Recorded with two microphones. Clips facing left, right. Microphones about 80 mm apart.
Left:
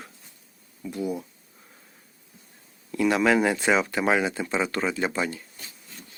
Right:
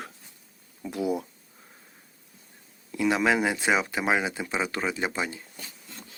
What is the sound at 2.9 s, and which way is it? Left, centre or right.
Speech, centre.